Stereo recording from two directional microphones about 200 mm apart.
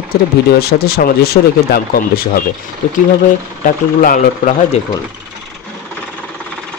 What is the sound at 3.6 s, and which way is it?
Speech, 45° left (ahead or behind).